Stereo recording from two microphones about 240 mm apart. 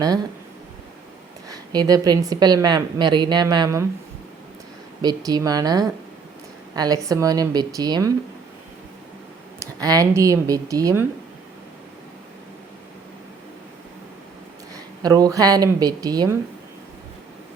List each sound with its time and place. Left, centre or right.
1.5 s a woman's voice: centre
5.0 s a woman's voice: centre
9.6 s a woman's voice: centre
15.0 s a woman's voice: centre